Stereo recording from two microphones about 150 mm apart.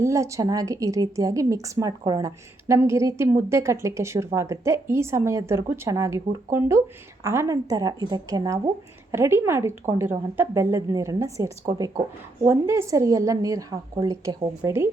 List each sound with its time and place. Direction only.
0.0 s a woman's voice: 20° right (ahead or behind)